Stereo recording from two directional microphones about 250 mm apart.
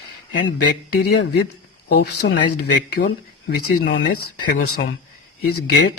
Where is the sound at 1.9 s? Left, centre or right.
Left.